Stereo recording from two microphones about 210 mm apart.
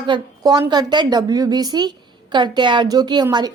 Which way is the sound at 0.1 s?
20° right (ahead or behind).